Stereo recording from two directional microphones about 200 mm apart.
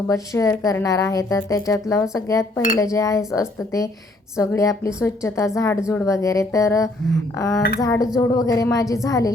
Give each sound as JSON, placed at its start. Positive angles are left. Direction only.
{"t": 0.1, "sound": "a woman's voice", "side_deg": 15}